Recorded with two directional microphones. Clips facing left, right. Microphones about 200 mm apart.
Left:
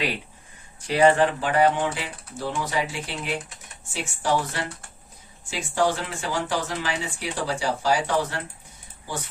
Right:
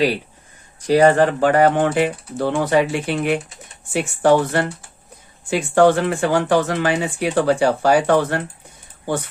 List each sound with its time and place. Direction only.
0.8 s speech: 40° right (ahead or behind); by 8.4 s 60° right (ahead or behind)